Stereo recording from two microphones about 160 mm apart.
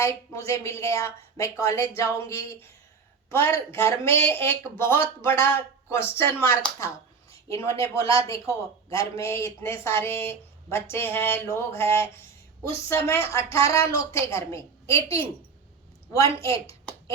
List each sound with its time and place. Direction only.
0.0 s speech: 20° left (ahead or behind)